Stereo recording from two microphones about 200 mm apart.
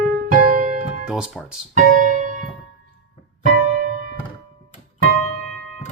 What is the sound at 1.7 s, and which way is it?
Piano, 40° right (ahead or behind).